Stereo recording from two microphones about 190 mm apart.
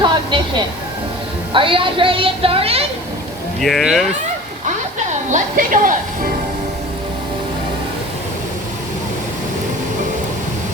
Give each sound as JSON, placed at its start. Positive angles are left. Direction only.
{"t": 0.0, "sound": "a woman's voice", "side_deg": -25}
{"t": 3.6, "sound": "speech", "side_deg": 0}
{"t": 5.3, "sound": "speech", "side_deg": -45}